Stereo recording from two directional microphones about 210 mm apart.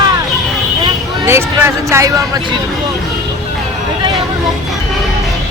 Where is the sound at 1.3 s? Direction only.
10° right (ahead or behind).